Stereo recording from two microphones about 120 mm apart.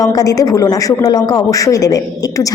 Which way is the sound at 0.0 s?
30° left (ahead or behind).